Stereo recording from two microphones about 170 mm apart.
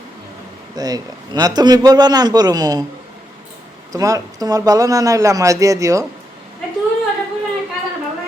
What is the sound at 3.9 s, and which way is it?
Speech, 20° right (ahead or behind).